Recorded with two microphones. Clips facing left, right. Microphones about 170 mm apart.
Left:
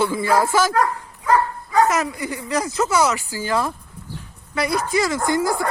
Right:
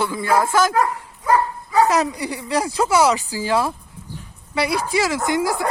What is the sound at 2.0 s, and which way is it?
Speech, 15° right (ahead or behind).